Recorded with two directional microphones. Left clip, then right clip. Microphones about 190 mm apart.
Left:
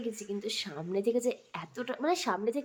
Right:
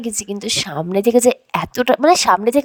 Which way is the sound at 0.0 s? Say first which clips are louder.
Right 11 dB; 60° right (ahead or behind).